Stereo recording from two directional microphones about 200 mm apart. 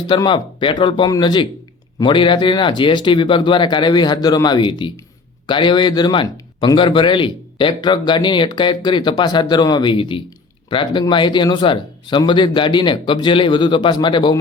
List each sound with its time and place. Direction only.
0.1 s speech: 25° left (ahead or behind)